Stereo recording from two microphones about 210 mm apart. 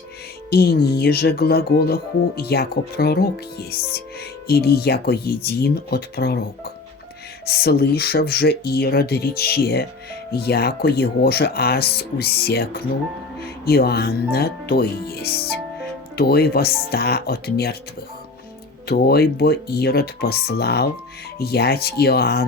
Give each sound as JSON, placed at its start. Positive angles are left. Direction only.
{"t": 0.5, "sound": "speech", "side_deg": 50}
{"t": 7.4, "sound": "speech", "side_deg": 50}
{"t": 18.9, "sound": "speech", "side_deg": 50}